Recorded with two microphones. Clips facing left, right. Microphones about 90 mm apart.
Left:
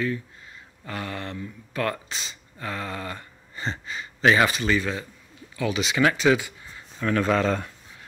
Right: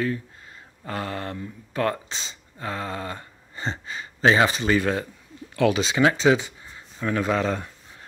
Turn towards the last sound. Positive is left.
turn(degrees=-15)  # may be behind; listen again after turning